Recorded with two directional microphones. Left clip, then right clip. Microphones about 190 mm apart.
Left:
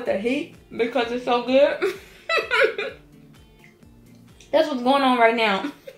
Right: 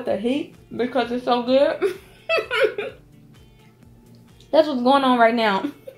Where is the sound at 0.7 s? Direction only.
40° right (ahead or behind).